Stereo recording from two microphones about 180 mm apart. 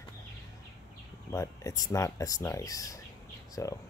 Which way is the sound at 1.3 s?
15° left (ahead or behind).